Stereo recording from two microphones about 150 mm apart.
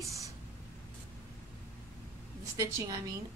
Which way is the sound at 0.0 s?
20° right (ahead or behind).